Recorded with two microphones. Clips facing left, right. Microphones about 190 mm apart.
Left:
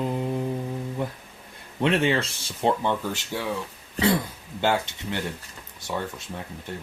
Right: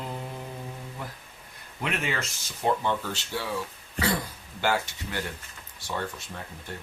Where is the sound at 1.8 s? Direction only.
30° left (ahead or behind).